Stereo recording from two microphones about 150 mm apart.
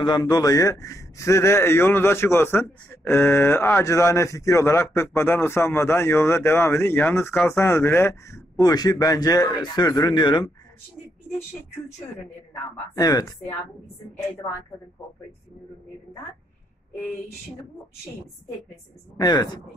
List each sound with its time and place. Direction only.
0.0 s speech: 30° left (ahead or behind)
12.9 s speech: 25° left (ahead or behind)
19.1 s speech: 25° left (ahead or behind)